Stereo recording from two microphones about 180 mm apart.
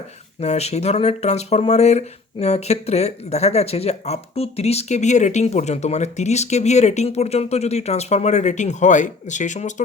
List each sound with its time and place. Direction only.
0.3 s speech: 35° left (ahead or behind)